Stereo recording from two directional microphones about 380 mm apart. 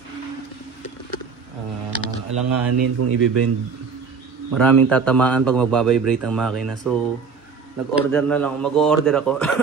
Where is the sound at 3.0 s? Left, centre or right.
Right.